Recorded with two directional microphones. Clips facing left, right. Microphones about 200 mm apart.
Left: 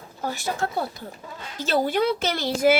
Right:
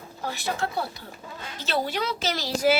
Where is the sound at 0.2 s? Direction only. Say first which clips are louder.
Left 2 dB; 45° left (ahead or behind).